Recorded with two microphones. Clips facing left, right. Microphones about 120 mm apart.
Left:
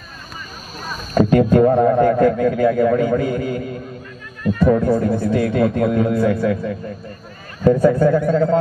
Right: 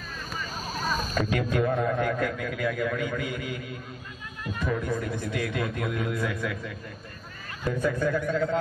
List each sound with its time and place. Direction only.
1.1 s a man's voice: 40° left (ahead or behind)